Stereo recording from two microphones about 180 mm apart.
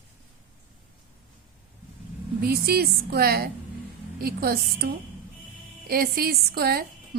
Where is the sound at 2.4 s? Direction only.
60° right (ahead or behind).